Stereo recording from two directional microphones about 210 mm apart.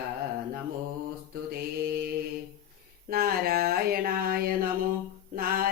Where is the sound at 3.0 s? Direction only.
45° right (ahead or behind).